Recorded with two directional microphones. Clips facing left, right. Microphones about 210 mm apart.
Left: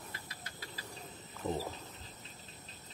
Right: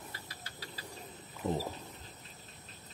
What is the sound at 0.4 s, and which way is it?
Cricket, 30° right (ahead or behind).